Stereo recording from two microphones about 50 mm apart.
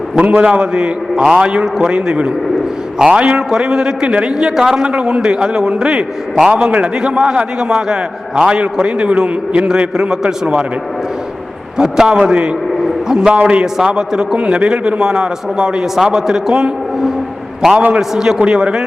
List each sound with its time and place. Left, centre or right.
0.2 s a man's voice: right
11.8 s a man's voice: centre